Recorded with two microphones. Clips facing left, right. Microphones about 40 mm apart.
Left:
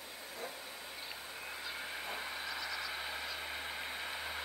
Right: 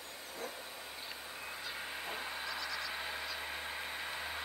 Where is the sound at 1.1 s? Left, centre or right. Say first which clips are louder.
Right 1 dB; centre.